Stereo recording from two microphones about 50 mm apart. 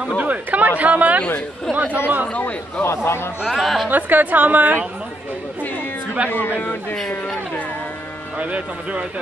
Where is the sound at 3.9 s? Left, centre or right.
Right.